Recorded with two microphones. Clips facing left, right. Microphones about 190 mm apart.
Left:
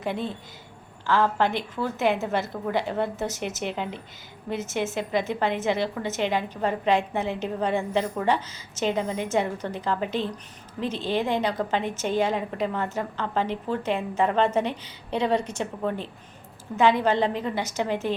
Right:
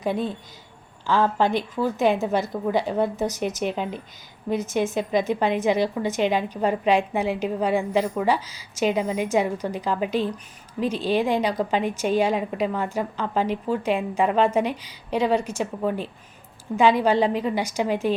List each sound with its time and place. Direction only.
0.0 s a woman's voice: 15° right (ahead or behind)